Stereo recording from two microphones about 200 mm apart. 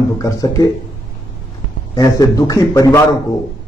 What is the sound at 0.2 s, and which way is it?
Speech, 15° left (ahead or behind).